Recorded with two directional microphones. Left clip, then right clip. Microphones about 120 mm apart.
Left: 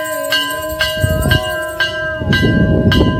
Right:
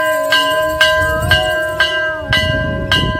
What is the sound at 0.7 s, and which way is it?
Train, 45° right (ahead or behind).